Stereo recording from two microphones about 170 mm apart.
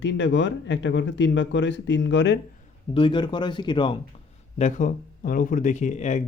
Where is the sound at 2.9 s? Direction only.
30° left (ahead or behind).